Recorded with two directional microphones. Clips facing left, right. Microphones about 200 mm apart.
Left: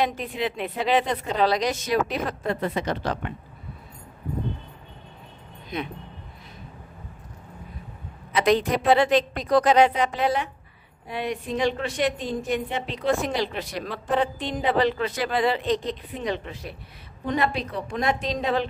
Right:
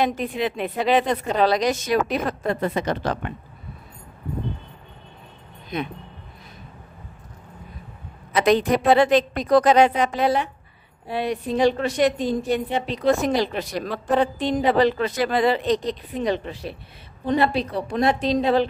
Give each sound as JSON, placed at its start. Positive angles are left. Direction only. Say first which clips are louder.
{"t": 0.0, "sound": "a woman's voice", "louder": "right 3 dB", "side_deg": -45}
{"t": 8.4, "sound": "a woman's voice", "louder": "right 3 dB", "side_deg": -50}